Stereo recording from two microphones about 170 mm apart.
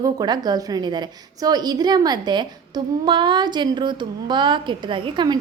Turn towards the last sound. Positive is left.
turn(degrees=-30)  # may be behind; listen again after turning